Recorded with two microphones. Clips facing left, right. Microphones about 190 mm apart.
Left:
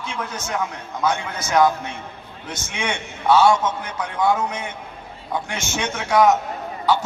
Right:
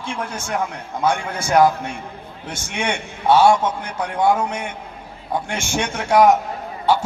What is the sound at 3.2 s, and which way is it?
A man's voice, 25° right (ahead or behind).